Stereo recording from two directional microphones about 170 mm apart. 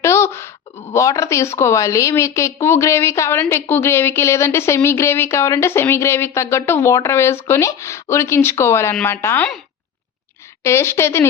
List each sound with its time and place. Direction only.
0.0 s a sound: 15° left (ahead or behind)
0.9 s a woman's voice: 20° left (ahead or behind)
10.6 s a woman's voice: 15° left (ahead or behind)